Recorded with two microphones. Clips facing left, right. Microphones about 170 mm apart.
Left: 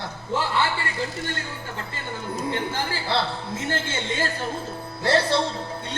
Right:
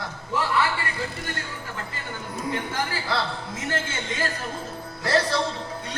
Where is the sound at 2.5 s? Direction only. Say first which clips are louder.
Right 1 dB; 30° left (ahead or behind).